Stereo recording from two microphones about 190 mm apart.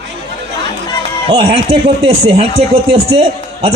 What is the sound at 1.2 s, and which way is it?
A man's voice, 30° right (ahead or behind).